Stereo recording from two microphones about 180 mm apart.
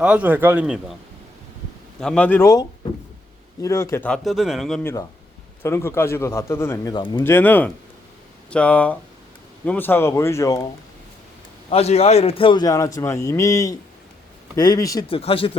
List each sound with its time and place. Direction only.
0.0 s speech: 5° right (ahead or behind)
2.0 s speech: 5° left (ahead or behind)
4.8 s speech: 15° left (ahead or behind)
7.2 s speech: 10° left (ahead or behind)
11.7 s a man's voice: 35° left (ahead or behind); by 15.0 s 20° left (ahead or behind)
15.0 s a man's voice: 30° left (ahead or behind)